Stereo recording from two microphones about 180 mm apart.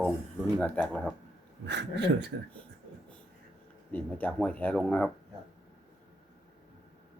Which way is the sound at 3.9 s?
10° left (ahead or behind).